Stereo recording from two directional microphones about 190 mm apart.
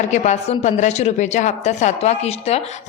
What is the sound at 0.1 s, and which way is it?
A woman's voice, 35° left (ahead or behind).